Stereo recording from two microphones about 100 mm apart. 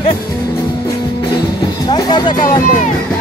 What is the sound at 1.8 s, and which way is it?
Music, 45° left (ahead or behind).